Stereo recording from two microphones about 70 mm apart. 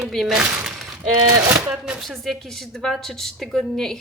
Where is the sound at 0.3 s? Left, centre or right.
Centre.